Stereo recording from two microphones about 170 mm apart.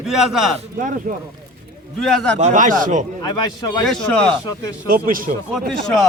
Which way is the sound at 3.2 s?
25° left (ahead or behind).